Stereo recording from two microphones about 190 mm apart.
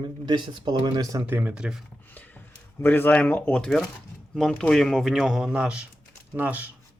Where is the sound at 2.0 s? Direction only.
10° left (ahead or behind).